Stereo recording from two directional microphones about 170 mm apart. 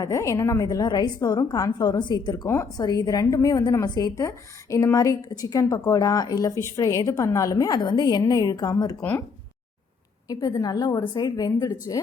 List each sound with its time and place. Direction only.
0.0 s a woman's voice: 20° left (ahead or behind)
10.2 s a woman's voice: 20° left (ahead or behind)